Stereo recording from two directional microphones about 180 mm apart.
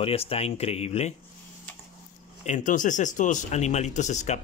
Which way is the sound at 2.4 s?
45° left (ahead or behind).